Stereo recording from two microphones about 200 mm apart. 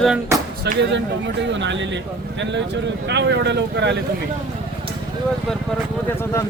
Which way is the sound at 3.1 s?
60° right (ahead or behind).